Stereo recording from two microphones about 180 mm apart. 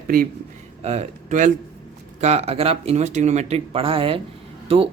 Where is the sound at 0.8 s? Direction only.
35° right (ahead or behind).